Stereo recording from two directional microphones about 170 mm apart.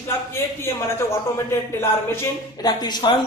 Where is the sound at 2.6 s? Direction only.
25° left (ahead or behind).